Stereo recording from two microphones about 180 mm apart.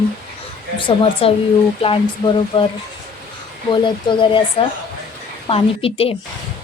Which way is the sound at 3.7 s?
25° left (ahead or behind).